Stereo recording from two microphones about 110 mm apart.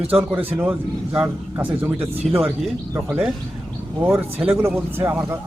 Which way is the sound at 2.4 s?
Centre (ahead or behind).